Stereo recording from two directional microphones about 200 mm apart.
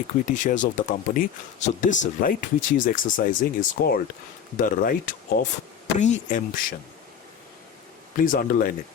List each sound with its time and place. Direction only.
0.3 s speech: 40° left (ahead or behind)
8.1 s speech: 45° left (ahead or behind)